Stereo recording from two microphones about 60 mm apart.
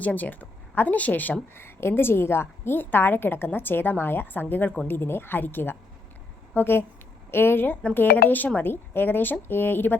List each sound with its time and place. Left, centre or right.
0.0 s speech: left
1.6 s a woman's voice: left